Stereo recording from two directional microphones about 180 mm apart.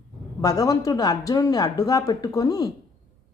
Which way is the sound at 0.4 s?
20° left (ahead or behind).